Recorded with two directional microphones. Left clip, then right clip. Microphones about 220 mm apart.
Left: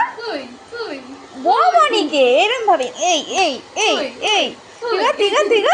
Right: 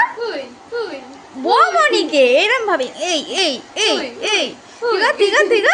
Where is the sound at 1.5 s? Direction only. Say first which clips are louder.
Even; 15° right (ahead or behind).